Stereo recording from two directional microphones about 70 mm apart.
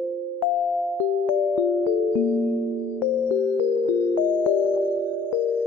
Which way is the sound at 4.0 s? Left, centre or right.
Left.